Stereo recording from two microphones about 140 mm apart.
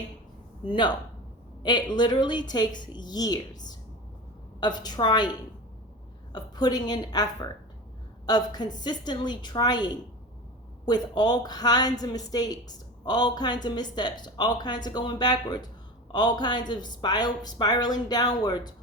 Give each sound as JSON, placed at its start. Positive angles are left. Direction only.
{"t": 0.6, "sound": "a woman's voice", "side_deg": 35}